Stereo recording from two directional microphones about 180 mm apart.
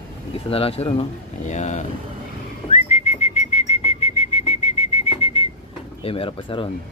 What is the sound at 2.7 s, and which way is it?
Whistling, 40° left (ahead or behind).